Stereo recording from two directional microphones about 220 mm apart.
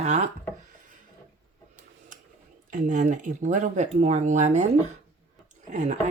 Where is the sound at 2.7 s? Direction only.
35° right (ahead or behind).